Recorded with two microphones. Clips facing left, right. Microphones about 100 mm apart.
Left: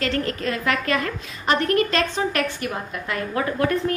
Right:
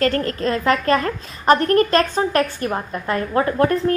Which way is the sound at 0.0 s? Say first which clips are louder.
Right 5 dB; 40° right (ahead or behind).